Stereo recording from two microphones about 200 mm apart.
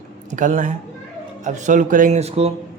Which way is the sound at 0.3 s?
40° right (ahead or behind).